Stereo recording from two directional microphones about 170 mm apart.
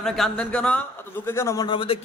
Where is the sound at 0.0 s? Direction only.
5° left (ahead or behind).